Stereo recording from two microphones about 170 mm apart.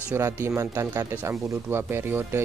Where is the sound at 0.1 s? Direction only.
15° right (ahead or behind).